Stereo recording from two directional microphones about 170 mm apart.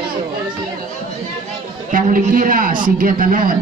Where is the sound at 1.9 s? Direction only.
55° right (ahead or behind).